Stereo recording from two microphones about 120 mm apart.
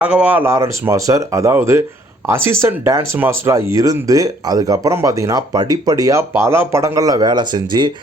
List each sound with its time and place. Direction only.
0.0 s speech: 10° right (ahead or behind); by 7.9 s 40° right (ahead or behind)